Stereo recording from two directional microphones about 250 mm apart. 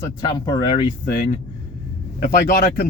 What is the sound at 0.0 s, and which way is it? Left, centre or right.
Speech, centre.